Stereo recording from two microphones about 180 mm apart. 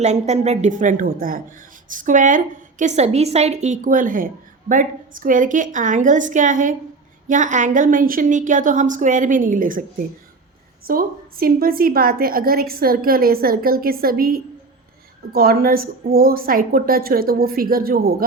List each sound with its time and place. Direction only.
0.0 s a woman's voice: 40° right (ahead or behind)
10.8 s a woman's voice: 55° right (ahead or behind)